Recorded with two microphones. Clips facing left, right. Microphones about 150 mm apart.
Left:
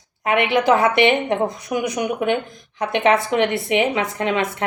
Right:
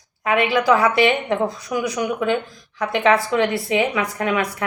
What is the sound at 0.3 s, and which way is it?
A woman's voice, 20° left (ahead or behind).